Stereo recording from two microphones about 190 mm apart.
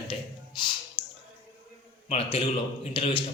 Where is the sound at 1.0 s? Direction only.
25° left (ahead or behind).